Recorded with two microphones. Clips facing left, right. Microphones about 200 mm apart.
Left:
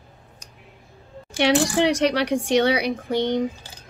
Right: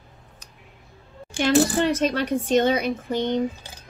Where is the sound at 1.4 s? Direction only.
75° left (ahead or behind).